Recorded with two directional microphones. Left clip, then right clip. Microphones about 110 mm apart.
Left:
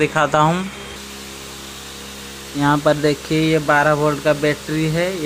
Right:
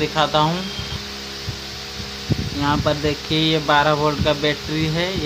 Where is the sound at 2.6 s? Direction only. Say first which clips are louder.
Left 5 dB; 55° left (ahead or behind).